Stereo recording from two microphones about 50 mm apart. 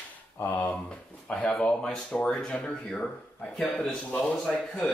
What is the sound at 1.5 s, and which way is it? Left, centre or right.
Speech, centre.